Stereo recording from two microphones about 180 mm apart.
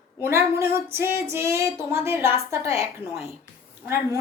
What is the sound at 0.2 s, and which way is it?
A woman's voice, 15° right (ahead or behind).